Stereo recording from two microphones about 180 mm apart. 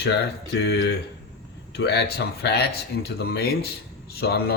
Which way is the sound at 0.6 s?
70° left (ahead or behind).